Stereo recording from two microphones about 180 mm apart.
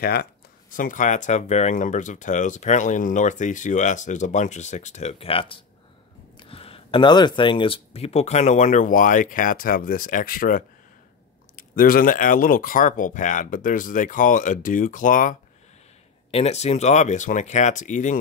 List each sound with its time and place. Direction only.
0.0 s speech: 60° left (ahead or behind)
16.3 s speech: 35° left (ahead or behind)